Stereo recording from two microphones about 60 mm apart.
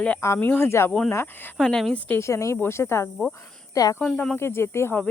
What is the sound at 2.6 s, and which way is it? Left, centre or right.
Speech, left.